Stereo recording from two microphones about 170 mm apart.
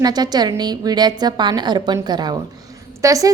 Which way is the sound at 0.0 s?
25° right (ahead or behind).